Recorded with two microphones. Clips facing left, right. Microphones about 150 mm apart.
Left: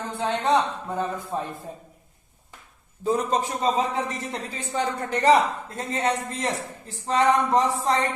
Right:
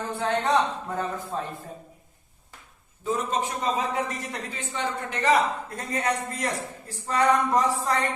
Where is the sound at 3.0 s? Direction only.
35° left (ahead or behind).